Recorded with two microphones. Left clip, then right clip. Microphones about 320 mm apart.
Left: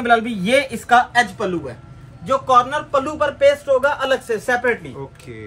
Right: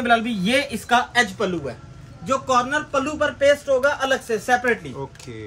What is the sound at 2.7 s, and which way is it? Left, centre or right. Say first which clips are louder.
Speech: left 2 dB; centre.